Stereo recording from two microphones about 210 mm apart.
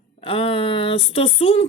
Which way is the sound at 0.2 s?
25° left (ahead or behind).